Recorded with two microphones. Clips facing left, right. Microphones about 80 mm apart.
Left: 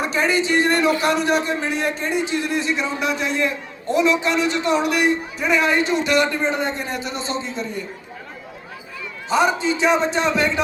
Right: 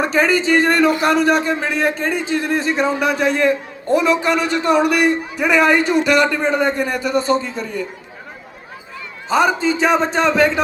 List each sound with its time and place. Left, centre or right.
0.0 s a man's voice: right
9.3 s a man's voice: right